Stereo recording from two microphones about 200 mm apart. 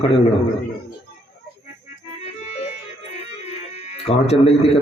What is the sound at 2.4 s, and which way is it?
Music, 30° left (ahead or behind).